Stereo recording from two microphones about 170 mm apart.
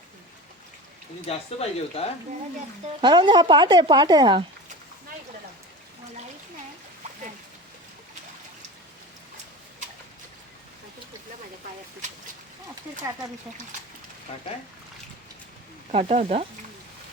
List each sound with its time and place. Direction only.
1.3 s speech: 35° left (ahead or behind)
3.0 s speech: 25° right (ahead or behind)
14.3 s speech: 40° left (ahead or behind)
15.9 s speech: 40° right (ahead or behind)